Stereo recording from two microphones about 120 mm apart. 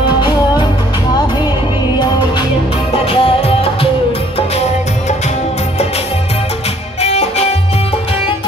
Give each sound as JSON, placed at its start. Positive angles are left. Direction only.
{"t": 2.9, "sound": "music", "side_deg": 50}
{"t": 4.4, "sound": "music", "side_deg": 60}
{"t": 7.0, "sound": "music", "side_deg": 60}